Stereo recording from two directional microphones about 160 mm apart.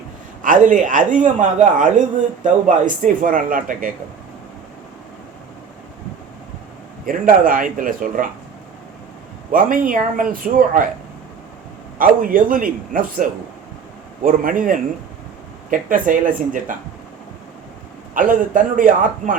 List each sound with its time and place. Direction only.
0.4 s a man's voice: 55° right (ahead or behind)
7.0 s a man's voice: 60° right (ahead or behind)
9.5 s a man's voice: 60° right (ahead or behind)
11.9 s a man's voice: 60° right (ahead or behind)
14.3 s a man's voice: 60° right (ahead or behind)
18.1 s a man's voice: 55° right (ahead or behind)